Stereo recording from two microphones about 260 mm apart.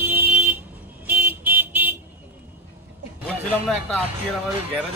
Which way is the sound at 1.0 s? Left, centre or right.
Centre.